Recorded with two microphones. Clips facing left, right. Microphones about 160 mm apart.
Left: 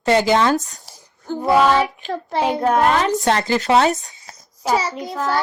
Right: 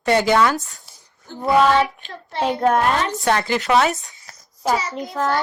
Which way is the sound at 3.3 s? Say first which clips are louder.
Left 1 dB; 35° left (ahead or behind).